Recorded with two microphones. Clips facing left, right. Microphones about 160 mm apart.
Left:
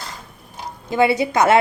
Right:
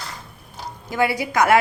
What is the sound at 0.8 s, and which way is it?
Speech, 20° left (ahead or behind).